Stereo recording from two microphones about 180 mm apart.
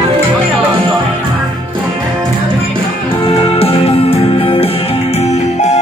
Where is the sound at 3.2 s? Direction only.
30° left (ahead or behind).